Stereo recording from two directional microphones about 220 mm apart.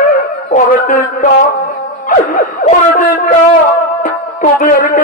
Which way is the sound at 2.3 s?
35° left (ahead or behind).